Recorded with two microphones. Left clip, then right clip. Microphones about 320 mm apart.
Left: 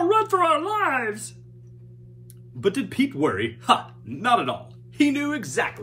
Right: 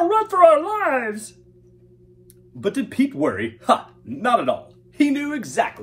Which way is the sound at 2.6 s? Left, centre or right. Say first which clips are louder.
Right 1 dB; centre.